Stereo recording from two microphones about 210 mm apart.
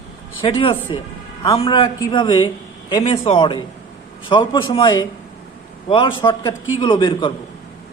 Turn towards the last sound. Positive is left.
turn(degrees=20)  # may be behind; listen again after turning